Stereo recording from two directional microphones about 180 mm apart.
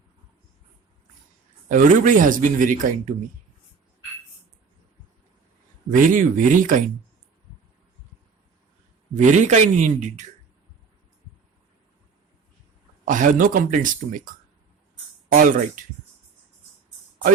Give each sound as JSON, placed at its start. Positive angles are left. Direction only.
{"t": 1.7, "sound": "a man's voice", "side_deg": -45}
{"t": 5.9, "sound": "a man's voice", "side_deg": -45}
{"t": 9.1, "sound": "speech", "side_deg": -40}
{"t": 13.1, "sound": "a man's voice", "side_deg": -45}